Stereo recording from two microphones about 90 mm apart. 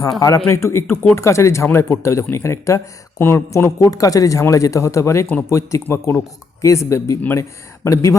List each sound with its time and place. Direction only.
0.2 s speech: 40° left (ahead or behind)